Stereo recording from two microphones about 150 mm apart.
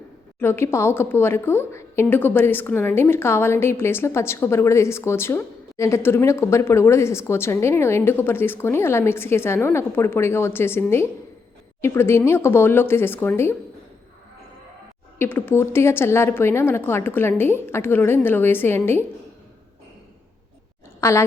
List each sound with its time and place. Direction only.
0.3 s a woman's voice: 15° left (ahead or behind)
15.2 s a woman's voice: 15° left (ahead or behind)
21.0 s a woman's voice: 20° left (ahead or behind)